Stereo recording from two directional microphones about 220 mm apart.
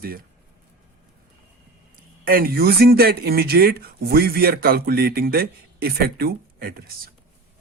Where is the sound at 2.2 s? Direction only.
40° right (ahead or behind).